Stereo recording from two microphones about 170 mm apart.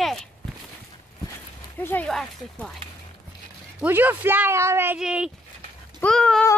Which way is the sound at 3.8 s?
10° right (ahead or behind).